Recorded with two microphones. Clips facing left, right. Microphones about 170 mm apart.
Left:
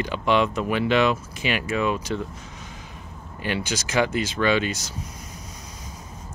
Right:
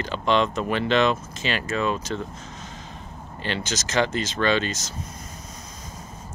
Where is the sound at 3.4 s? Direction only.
10° left (ahead or behind).